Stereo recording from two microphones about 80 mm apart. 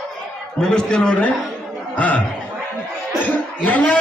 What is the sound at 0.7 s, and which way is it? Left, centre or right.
A man's voice, centre.